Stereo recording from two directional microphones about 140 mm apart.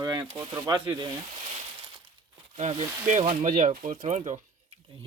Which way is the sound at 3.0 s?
60° right (ahead or behind).